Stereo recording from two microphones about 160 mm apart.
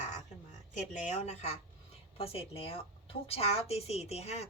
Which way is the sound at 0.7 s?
50° left (ahead or behind).